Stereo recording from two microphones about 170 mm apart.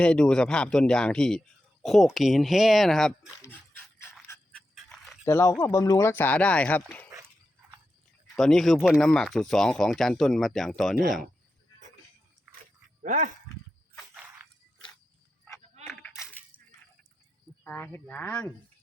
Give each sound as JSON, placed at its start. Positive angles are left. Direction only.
{"t": 0.0, "sound": "speech", "side_deg": 5}
{"t": 4.7, "sound": "pant", "side_deg": 0}
{"t": 5.2, "sound": "speech", "side_deg": 15}
{"t": 8.4, "sound": "speech", "side_deg": 0}
{"t": 13.0, "sound": "speech", "side_deg": -50}
{"t": 13.9, "sound": "a sound", "side_deg": -5}
{"t": 15.9, "sound": "a sound", "side_deg": 0}
{"t": 17.6, "sound": "speech", "side_deg": 10}